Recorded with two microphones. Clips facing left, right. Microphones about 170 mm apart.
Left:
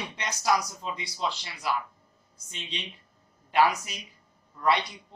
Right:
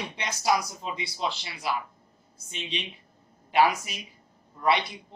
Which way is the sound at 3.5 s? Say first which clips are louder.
Right 1 dB; 25° right (ahead or behind).